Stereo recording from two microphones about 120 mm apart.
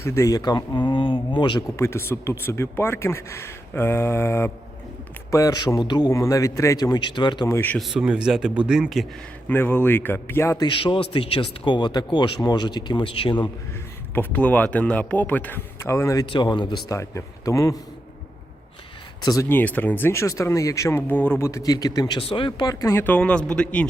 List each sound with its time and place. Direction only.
0.0 s a man's voice: 25° left (ahead or behind); by 1.6 s 40° left (ahead or behind)
1.7 s a man's voice: 20° left (ahead or behind); by 7.4 s 40° left (ahead or behind)
7.4 s a man's voice: 20° left (ahead or behind)
7.8 s speech: 5° right (ahead or behind)
9.5 s speech: 15° left (ahead or behind)
10.6 s a man's voice: 40° left (ahead or behind)
14.2 s speech: 15° left (ahead or behind)
16.2 s a man's voice: 40° left (ahead or behind)
16.9 s a man's voice: 25° left (ahead or behind)
19.2 s a man's voice: 30° left (ahead or behind)
19.5 s a man's voice: 15° left (ahead or behind); by 22.2 s 35° left (ahead or behind)
22.2 s a man's voice: 50° left (ahead or behind); by 23.8 s 10° left (ahead or behind)